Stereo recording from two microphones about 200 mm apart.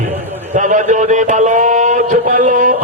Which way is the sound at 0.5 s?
40° right (ahead or behind).